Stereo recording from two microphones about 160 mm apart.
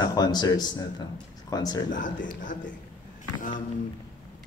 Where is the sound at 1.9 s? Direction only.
55° left (ahead or behind).